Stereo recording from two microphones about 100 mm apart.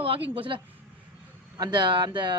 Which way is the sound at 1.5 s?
45° right (ahead or behind).